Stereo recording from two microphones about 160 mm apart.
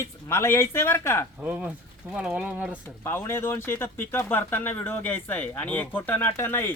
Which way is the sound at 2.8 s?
15° left (ahead or behind).